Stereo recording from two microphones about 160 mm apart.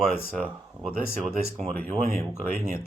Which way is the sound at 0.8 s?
10° right (ahead or behind).